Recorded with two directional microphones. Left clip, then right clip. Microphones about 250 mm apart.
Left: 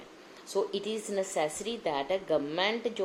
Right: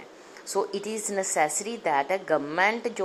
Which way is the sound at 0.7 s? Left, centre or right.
Centre.